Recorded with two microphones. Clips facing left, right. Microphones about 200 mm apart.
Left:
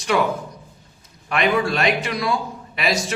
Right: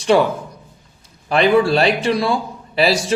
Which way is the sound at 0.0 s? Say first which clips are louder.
Right 6 dB; 30° right (ahead or behind).